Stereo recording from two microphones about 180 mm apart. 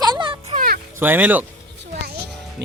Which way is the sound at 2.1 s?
65° right (ahead or behind).